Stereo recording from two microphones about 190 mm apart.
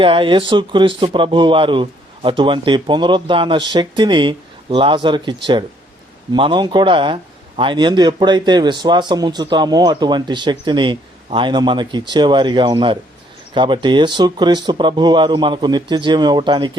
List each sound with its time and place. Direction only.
0.0 s speech: 25° right (ahead or behind)
6.3 s speech: 25° right (ahead or behind)